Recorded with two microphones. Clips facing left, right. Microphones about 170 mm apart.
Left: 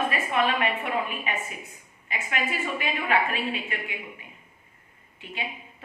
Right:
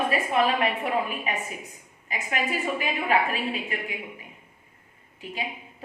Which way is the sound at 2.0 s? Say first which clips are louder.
Right 1 dB; 40° right (ahead or behind).